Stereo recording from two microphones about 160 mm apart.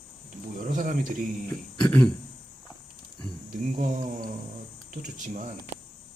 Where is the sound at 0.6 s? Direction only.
55° right (ahead or behind).